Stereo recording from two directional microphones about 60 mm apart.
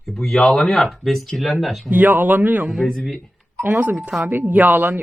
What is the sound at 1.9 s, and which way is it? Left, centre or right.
Speech, right.